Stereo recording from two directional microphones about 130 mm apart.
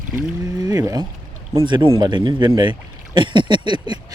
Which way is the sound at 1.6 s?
40° right (ahead or behind).